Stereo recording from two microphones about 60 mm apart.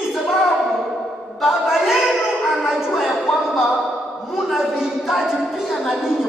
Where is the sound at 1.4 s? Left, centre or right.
Centre.